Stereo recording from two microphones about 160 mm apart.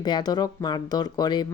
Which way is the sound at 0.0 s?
25° left (ahead or behind).